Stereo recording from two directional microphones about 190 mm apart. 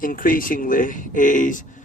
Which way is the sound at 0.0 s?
45° left (ahead or behind).